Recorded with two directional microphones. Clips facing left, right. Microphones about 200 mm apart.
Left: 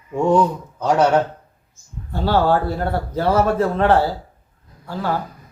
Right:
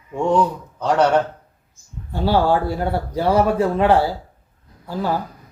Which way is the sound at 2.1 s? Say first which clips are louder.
Even; 15° right (ahead or behind).